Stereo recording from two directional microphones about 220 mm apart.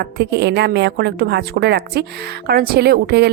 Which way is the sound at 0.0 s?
50° right (ahead or behind).